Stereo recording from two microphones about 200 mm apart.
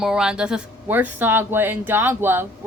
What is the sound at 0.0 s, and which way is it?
Speech, 5° right (ahead or behind).